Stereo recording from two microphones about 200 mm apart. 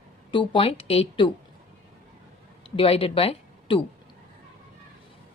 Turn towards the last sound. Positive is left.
turn(degrees=25)  # may be behind; listen again after turning